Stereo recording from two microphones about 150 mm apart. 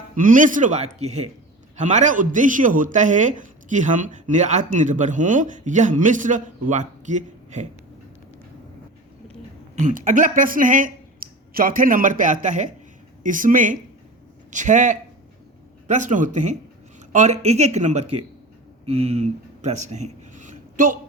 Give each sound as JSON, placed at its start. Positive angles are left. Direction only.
{"t": 0.2, "sound": "speech", "side_deg": -60}
{"t": 9.7, "sound": "speech", "side_deg": -55}